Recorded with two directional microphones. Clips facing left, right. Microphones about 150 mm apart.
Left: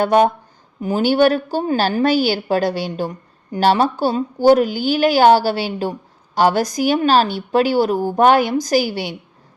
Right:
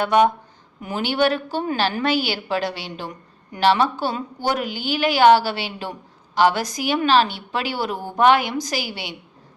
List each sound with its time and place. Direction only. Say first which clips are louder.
0.0 s a woman's voice: left 3 dB; 40° left (ahead or behind)